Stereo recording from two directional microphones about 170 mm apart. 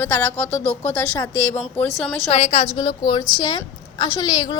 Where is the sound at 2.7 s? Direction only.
25° left (ahead or behind).